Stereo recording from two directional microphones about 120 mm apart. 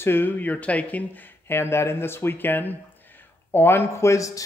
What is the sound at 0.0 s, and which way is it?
Speech, 15° left (ahead or behind).